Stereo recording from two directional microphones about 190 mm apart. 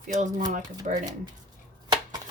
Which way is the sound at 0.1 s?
40° right (ahead or behind).